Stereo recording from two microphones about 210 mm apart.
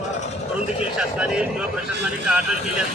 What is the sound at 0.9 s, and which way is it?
Speech, 5° right (ahead or behind).